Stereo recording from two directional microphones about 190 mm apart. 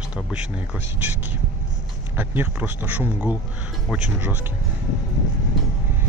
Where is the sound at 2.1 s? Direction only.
10° right (ahead or behind).